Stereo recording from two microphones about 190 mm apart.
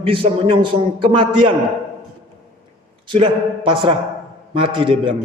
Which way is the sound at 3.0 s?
25° right (ahead or behind).